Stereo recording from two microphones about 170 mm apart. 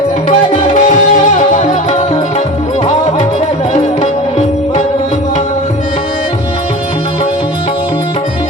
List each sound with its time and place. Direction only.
0.3 s music: 40° left (ahead or behind)